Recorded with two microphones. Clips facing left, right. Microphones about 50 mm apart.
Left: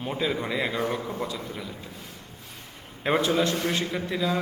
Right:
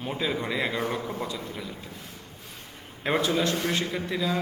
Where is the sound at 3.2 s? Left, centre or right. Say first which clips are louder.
Left 1 dB; left.